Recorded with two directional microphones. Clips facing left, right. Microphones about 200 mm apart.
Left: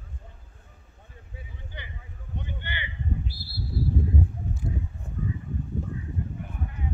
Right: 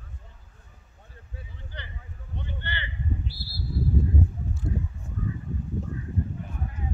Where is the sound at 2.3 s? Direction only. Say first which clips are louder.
Even; 15° left (ahead or behind).